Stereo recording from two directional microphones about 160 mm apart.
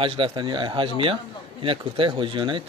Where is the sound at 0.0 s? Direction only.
35° right (ahead or behind).